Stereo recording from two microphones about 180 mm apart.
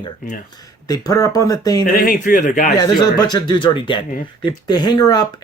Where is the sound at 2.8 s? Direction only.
25° left (ahead or behind).